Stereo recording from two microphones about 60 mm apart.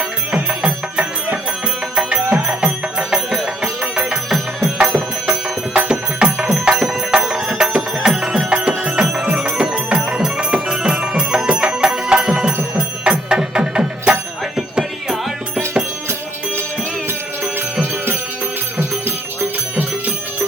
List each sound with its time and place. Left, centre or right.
0.6 s music: centre
5.7 s music: centre